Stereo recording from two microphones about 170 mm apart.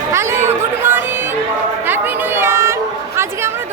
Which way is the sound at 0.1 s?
15° right (ahead or behind).